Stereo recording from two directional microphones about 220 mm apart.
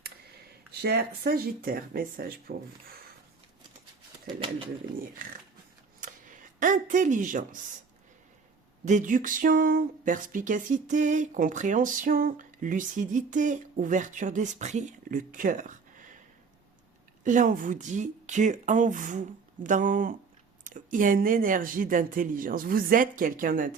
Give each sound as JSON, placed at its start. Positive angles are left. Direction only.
{"t": 0.8, "sound": "speech", "side_deg": -45}
{"t": 4.3, "sound": "pigeon", "side_deg": -25}
{"t": 6.0, "sound": "a sound", "side_deg": -35}
{"t": 8.8, "sound": "speech", "side_deg": -35}
{"t": 17.2, "sound": "speech", "side_deg": -35}